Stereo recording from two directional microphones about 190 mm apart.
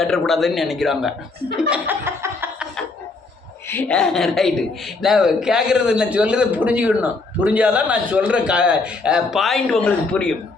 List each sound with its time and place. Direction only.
0.0 s a man's voice: centre (ahead or behind)
1.7 s laughter: 10° right (ahead or behind)
3.7 s a man's voice: 10° left (ahead or behind)